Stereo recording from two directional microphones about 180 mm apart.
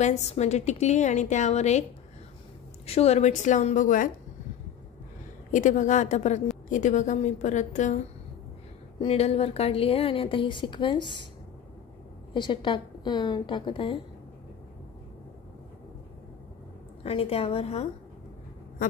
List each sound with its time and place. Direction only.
0.0 s a woman's voice: 40° left (ahead or behind)
2.9 s a woman's voice: 35° left (ahead or behind)
5.5 s a woman's voice: 45° left (ahead or behind)
9.0 s a woman's voice: 35° left (ahead or behind)
12.4 s a woman's voice: 25° left (ahead or behind)
17.0 s a woman's voice: 30° left (ahead or behind)